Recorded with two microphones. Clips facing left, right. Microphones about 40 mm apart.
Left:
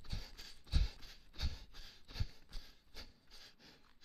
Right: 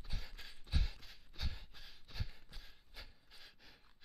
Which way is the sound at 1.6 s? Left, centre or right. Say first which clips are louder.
Right 1 dB; centre.